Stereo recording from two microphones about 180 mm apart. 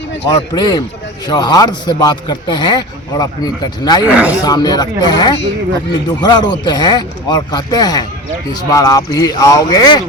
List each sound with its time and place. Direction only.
0.3 s speech: 25° left (ahead or behind)
4.1 s speech: 5° right (ahead or behind)
4.4 s speech: 20° left (ahead or behind)